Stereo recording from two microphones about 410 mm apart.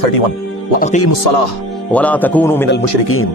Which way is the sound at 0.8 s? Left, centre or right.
Centre.